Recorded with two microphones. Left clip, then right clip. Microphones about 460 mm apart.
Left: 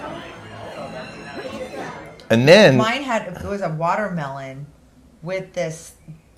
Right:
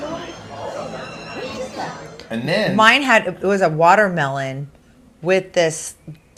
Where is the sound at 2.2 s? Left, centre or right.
Left.